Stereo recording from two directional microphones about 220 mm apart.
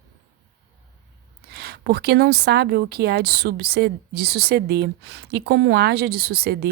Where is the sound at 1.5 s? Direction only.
45° right (ahead or behind).